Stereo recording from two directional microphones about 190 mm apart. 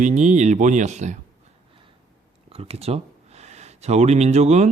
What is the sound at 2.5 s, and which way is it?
Speech, 30° right (ahead or behind).